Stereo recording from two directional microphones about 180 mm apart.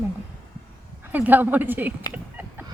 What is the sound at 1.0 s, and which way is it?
Speech, 10° right (ahead or behind).